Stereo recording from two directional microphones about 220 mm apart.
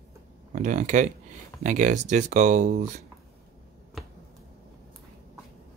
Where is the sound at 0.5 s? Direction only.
35° right (ahead or behind).